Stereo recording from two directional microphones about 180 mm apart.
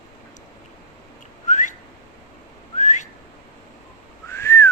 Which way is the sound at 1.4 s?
45° left (ahead or behind).